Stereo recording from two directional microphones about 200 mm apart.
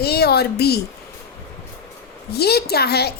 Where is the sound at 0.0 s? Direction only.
50° left (ahead or behind).